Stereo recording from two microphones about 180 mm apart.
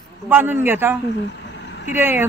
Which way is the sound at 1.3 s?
75° left (ahead or behind).